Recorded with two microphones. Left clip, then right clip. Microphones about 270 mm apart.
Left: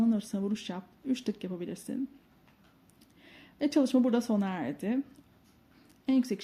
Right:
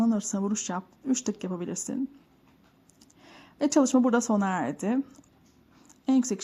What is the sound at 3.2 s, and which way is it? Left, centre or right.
Speech, centre.